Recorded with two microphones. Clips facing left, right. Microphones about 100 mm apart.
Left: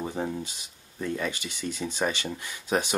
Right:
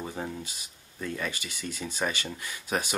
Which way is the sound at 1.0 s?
20° left (ahead or behind).